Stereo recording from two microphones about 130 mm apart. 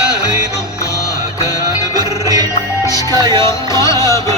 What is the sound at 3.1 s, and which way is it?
Music, 30° right (ahead or behind).